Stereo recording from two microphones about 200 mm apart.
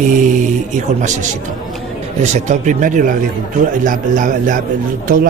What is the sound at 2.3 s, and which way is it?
Speech, 40° right (ahead or behind).